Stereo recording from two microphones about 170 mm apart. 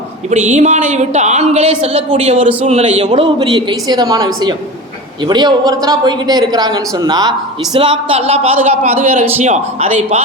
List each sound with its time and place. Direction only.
0.3 s a man's voice: 45° right (ahead or behind)